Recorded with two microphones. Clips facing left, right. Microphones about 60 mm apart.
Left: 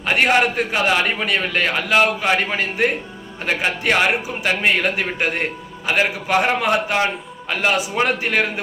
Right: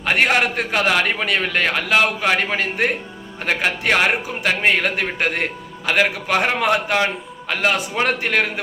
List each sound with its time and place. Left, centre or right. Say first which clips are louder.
0.0 s a man's voice: left 1 dB; right